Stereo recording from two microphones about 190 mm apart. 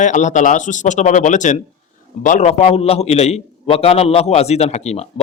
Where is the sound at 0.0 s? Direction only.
40° left (ahead or behind).